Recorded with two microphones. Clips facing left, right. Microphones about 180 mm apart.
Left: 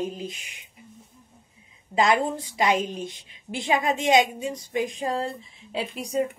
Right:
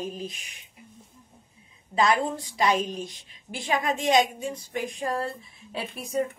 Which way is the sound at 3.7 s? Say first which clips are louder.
Left 2 dB; 20° left (ahead or behind).